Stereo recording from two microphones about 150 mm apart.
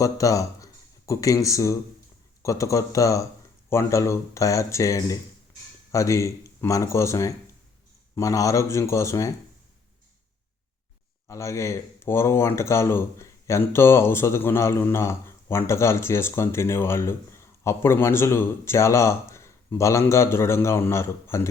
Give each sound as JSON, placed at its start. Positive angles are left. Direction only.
{"t": 0.0, "sound": "speech", "side_deg": 20}
{"t": 11.3, "sound": "speech", "side_deg": 20}